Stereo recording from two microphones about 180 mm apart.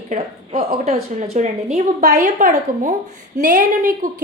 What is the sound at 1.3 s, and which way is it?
A woman's voice, 40° right (ahead or behind).